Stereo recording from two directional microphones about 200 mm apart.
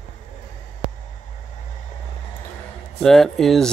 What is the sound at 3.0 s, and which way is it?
Speech, centre (ahead or behind).